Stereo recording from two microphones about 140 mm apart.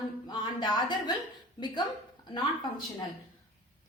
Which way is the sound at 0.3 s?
30° left (ahead or behind).